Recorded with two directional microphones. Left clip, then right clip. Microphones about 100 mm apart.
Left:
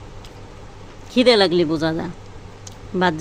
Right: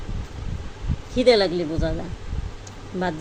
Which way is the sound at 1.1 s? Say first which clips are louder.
Left 3 dB; 65° left (ahead or behind).